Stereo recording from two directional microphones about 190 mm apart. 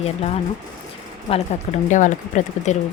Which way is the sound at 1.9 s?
40° left (ahead or behind).